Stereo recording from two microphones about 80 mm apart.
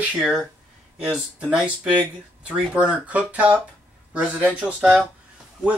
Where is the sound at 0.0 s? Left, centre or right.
Centre.